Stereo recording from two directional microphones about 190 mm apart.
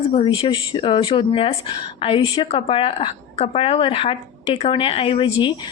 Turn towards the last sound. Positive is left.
turn(degrees=25)  # may be behind; listen again after turning